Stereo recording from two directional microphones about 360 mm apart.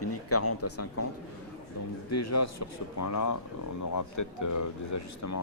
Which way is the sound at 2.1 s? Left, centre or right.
Left.